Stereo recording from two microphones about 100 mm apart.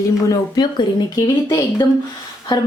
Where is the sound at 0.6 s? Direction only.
50° left (ahead or behind).